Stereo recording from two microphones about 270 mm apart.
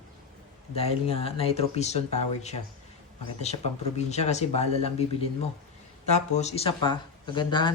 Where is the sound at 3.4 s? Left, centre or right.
Left.